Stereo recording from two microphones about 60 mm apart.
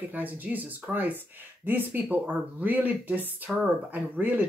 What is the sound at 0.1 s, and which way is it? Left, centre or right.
Speech, right.